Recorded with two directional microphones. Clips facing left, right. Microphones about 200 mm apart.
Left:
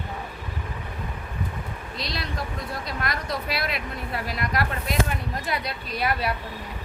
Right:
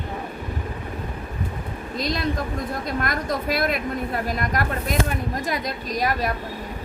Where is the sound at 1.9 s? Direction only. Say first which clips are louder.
Right 8 dB; 45° right (ahead or behind).